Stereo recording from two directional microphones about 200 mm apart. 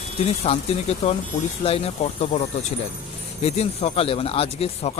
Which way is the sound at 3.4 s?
30° left (ahead or behind).